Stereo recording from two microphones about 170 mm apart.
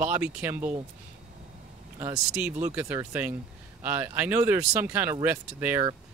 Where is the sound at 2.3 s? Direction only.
10° right (ahead or behind).